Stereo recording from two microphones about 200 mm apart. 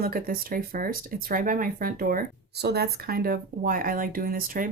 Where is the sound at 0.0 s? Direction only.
45° right (ahead or behind).